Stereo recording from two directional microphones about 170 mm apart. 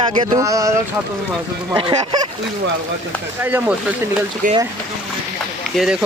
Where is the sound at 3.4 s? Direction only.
10° right (ahead or behind).